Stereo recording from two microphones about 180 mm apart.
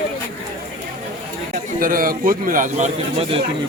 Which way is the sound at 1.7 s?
50° right (ahead or behind).